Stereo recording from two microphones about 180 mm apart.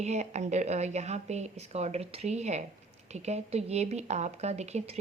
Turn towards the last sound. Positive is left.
turn(degrees=-35)  # may be behind; listen again after turning